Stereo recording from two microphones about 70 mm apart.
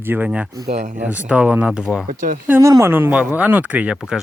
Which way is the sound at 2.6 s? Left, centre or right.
Right.